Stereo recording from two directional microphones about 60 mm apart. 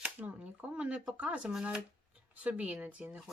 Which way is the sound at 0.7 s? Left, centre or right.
Centre.